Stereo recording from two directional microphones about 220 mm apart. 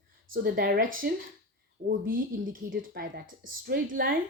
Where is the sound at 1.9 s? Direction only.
40° right (ahead or behind).